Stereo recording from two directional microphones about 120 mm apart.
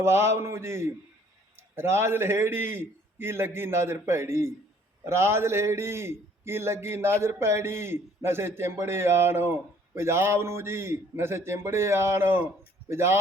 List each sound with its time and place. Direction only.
0.0 s a man's voice: 20° right (ahead or behind)